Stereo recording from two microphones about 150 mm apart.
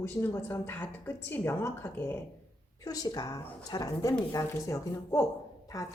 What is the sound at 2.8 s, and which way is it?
A woman's voice, 25° left (ahead or behind).